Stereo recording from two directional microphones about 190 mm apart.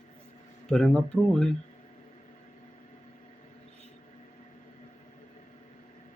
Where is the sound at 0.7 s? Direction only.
5° left (ahead or behind).